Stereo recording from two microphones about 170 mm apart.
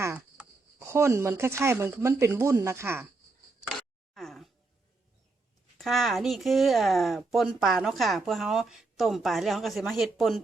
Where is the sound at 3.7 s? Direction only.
Centre (ahead or behind).